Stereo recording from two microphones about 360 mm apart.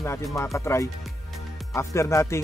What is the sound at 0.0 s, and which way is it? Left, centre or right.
Music, centre.